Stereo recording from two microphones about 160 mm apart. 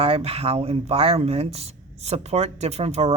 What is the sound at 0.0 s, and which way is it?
Speech, 35° right (ahead or behind).